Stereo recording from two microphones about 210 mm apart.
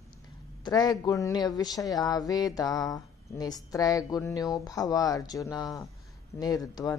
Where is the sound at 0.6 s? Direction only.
20° left (ahead or behind).